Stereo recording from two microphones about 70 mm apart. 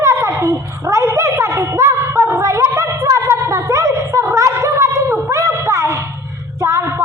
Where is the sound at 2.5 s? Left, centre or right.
Right.